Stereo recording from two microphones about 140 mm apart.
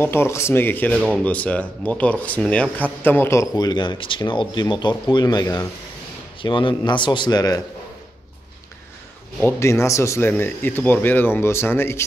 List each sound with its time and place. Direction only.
0.0 s speech: 15° left (ahead or behind)
9.4 s speech: 20° left (ahead or behind)